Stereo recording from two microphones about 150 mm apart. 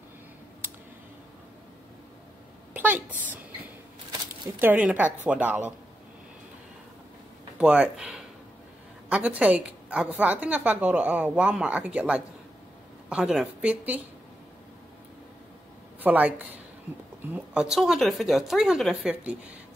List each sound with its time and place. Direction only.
2.7 s speech: 10° right (ahead or behind)
4.6 s a woman's voice: 10° right (ahead or behind)
7.5 s a woman's voice: 10° right (ahead or behind)
16.0 s a woman's voice: 10° right (ahead or behind)